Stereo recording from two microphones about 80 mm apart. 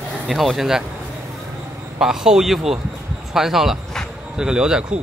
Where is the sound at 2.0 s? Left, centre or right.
Centre.